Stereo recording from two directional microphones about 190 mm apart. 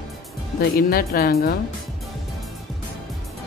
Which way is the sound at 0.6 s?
50° left (ahead or behind).